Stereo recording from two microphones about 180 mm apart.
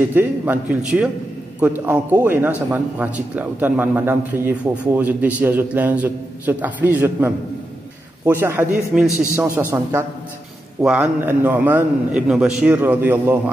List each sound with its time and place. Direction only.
0.1 s a man's voice: 10° right (ahead or behind)